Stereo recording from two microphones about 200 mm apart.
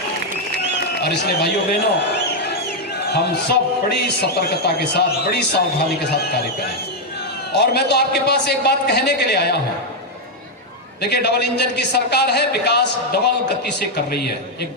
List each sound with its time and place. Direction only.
1.0 s a man's voice: 55° left (ahead or behind)
7.5 s a man's voice: 55° left (ahead or behind)
11.0 s a man's voice: 55° left (ahead or behind)